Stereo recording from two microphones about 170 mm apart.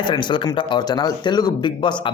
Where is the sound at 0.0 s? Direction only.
25° left (ahead or behind).